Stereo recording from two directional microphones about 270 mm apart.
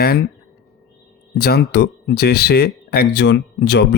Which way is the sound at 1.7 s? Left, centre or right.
Left.